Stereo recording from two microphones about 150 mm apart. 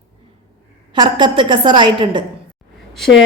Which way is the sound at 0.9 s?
30° right (ahead or behind).